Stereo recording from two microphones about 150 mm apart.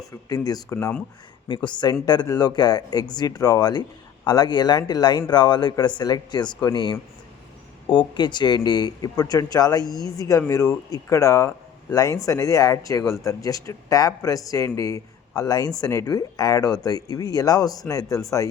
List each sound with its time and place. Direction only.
0.3 s speech: 25° left (ahead or behind)
1.5 s speech: 30° left (ahead or behind)